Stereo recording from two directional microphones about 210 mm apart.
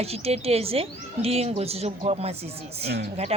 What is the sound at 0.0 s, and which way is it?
A woman's voice, 30° right (ahead or behind).